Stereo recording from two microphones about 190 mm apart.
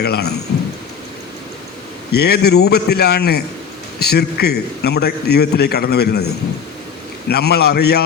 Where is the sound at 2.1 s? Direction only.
60° left (ahead or behind).